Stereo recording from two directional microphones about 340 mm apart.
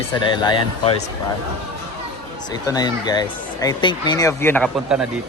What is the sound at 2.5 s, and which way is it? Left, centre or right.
Speech, centre.